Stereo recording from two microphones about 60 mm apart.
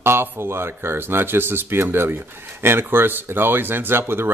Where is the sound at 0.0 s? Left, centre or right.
Right.